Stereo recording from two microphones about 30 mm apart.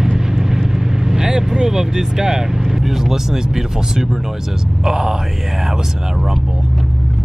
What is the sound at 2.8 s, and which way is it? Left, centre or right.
Speech, centre.